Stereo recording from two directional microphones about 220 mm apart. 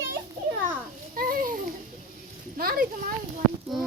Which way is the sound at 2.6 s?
40° right (ahead or behind).